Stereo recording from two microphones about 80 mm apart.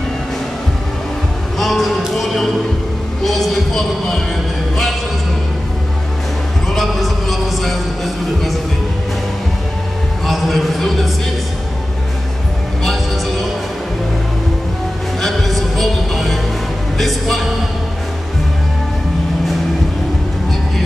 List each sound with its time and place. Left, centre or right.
1.6 s music: centre
3.3 s speech: centre
6.7 s music: centre
10.2 s a sound: centre
15.2 s music: centre